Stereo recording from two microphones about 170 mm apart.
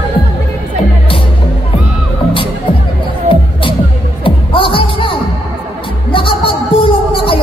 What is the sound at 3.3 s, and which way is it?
Music, 30° left (ahead or behind).